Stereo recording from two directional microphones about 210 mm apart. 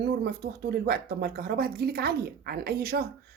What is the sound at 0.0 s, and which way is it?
A woman's voice, 50° right (ahead or behind).